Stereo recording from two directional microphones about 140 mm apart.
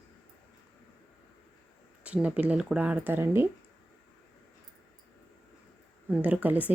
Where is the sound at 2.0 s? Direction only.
10° right (ahead or behind).